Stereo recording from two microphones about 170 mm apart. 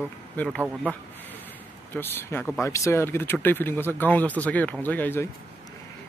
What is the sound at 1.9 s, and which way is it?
Speech, 15° left (ahead or behind).